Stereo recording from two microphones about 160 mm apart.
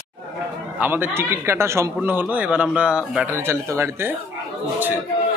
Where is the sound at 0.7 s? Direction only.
10° right (ahead or behind).